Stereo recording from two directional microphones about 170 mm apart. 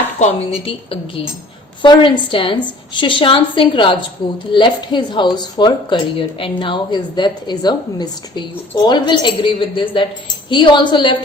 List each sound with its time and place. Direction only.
0.2 s a woman's voice: 35° left (ahead or behind)